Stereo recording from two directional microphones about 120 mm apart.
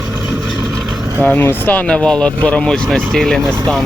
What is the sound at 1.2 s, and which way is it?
Speech, 15° left (ahead or behind).